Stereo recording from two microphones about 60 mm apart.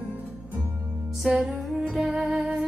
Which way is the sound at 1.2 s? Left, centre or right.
Centre.